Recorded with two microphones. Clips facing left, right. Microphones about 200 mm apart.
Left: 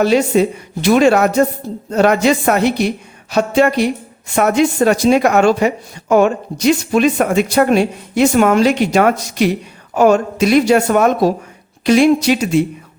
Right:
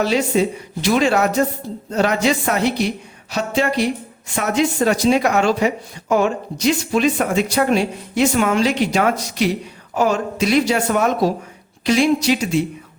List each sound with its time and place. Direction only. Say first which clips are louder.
0.0 s speech: left 5 dB; 55° left (ahead or behind)